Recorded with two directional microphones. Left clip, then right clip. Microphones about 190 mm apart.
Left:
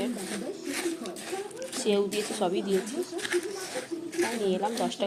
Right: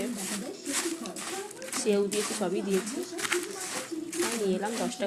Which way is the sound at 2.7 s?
20° right (ahead or behind).